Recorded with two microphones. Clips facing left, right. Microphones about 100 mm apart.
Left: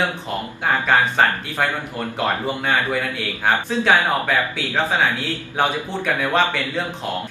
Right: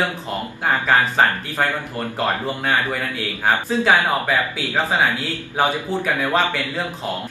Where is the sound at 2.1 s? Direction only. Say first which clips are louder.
Even; centre (ahead or behind).